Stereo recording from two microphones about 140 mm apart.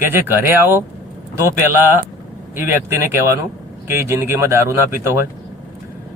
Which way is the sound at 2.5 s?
15° right (ahead or behind).